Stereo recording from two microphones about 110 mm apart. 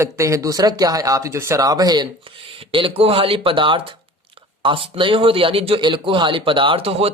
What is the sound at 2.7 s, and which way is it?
A man's voice, 55° right (ahead or behind).